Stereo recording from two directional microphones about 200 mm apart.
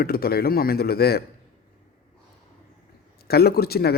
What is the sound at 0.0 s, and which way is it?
Speech, 50° left (ahead or behind).